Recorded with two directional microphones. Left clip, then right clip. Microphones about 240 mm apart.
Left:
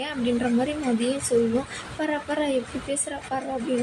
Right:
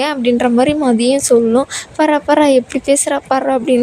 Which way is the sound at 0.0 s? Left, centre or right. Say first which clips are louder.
Right 12 dB; right.